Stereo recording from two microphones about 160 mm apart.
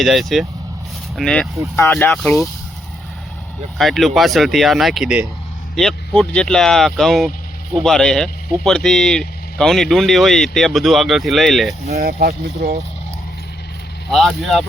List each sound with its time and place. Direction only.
0.0 s speech: centre (ahead or behind)
1.7 s speech: 15° left (ahead or behind)
3.8 s speech: centre (ahead or behind)
12.5 s speech: 75° right (ahead or behind)
14.1 s speech: centre (ahead or behind)